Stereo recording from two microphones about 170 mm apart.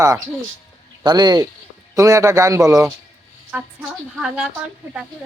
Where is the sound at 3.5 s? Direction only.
5° right (ahead or behind).